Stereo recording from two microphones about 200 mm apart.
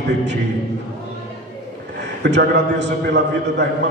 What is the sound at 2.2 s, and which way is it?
A man's voice, 60° right (ahead or behind).